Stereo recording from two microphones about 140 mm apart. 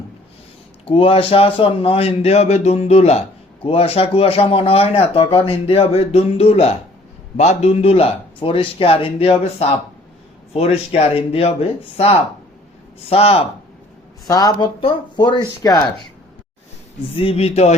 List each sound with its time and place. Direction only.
0.9 s a man's voice: 40° left (ahead or behind)
14.3 s speech: 25° left (ahead or behind)
14.5 s speech: 40° left (ahead or behind)
17.2 s a man's voice: 45° left (ahead or behind)